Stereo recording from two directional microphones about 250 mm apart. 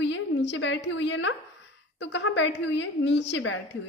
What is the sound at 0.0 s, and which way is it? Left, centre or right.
A woman's voice, left.